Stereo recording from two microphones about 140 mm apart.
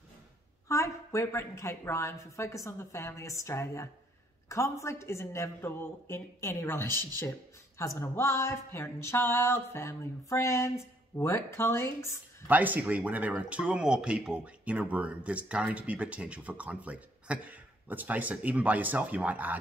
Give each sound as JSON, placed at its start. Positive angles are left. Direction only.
{"t": 0.7, "sound": "a woman's voice", "side_deg": 20}
{"t": 12.4, "sound": "speech", "side_deg": -10}